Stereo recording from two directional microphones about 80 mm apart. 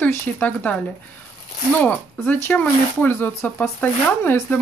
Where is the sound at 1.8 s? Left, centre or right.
Centre.